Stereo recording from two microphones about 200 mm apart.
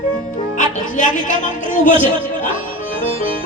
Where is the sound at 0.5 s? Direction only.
40° left (ahead or behind).